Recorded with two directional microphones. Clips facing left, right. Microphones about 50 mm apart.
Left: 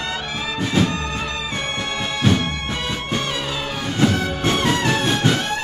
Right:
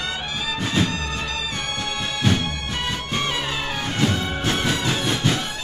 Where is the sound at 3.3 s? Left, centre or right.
Centre.